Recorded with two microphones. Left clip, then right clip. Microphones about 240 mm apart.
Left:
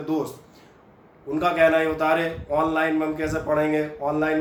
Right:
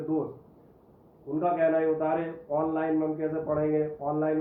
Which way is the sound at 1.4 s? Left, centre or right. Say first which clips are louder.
Left 6 dB; centre.